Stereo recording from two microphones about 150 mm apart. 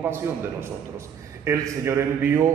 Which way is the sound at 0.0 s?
15° right (ahead or behind).